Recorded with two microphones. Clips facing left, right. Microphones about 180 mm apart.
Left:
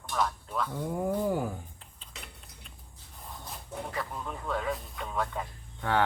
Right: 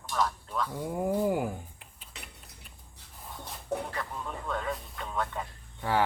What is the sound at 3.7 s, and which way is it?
Speech, 70° right (ahead or behind).